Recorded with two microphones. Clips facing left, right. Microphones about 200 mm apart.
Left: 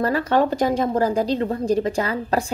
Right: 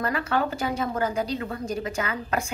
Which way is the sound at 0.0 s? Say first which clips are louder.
Left 7 dB; 30° left (ahead or behind).